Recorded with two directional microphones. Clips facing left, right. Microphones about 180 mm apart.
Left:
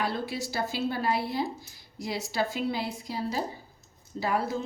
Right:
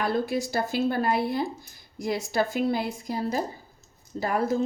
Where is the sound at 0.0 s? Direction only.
50° right (ahead or behind).